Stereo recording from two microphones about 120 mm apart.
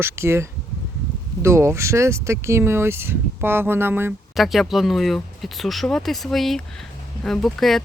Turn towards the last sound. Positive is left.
turn(degrees=0)  # may be behind; listen again after turning